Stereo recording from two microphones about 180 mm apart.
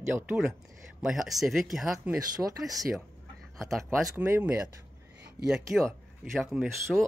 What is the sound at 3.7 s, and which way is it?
Speech, 5° right (ahead or behind).